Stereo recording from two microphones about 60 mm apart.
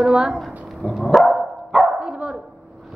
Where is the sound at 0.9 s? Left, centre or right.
Centre.